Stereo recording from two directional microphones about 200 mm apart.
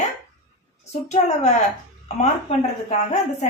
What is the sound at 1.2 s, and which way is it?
A woman's voice, 35° left (ahead or behind).